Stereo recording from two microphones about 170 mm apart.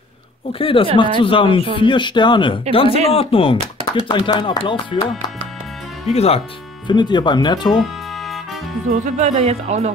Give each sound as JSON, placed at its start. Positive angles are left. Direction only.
{"t": 0.5, "sound": "speech", "side_deg": 30}
{"t": 6.0, "sound": "speech", "side_deg": 35}
{"t": 6.9, "sound": "speech", "side_deg": 25}
{"t": 9.0, "sound": "speech", "side_deg": -40}